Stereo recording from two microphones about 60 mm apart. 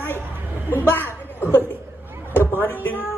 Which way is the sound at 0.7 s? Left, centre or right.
Left.